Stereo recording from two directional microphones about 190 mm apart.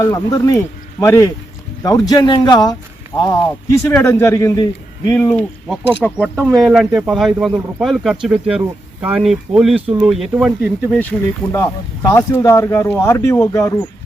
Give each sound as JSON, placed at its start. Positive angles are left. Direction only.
{"t": 0.0, "sound": "speech", "side_deg": 20}
{"t": 5.1, "sound": "speech", "side_deg": 5}
{"t": 10.9, "sound": "speech", "side_deg": 5}